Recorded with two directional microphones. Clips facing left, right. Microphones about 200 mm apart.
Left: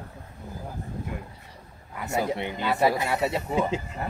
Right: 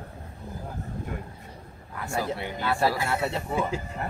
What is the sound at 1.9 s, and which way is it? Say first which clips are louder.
Speech: left 3 dB; 20° left (ahead or behind).